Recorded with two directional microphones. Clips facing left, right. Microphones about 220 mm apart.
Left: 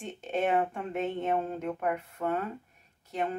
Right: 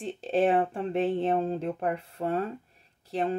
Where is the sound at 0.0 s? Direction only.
30° right (ahead or behind).